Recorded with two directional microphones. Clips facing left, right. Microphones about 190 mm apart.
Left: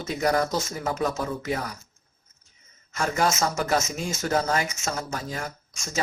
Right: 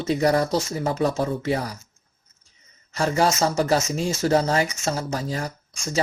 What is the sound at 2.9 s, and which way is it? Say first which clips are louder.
Speech: right 4 dB; 35° right (ahead or behind).